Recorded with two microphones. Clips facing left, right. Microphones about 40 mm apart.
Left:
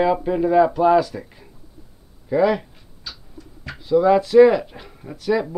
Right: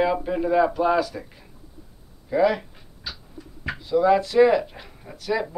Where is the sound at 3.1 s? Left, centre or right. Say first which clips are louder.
Right 1 dB; centre.